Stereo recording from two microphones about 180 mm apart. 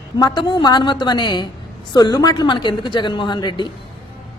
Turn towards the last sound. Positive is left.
turn(degrees=25)  # may be behind; listen again after turning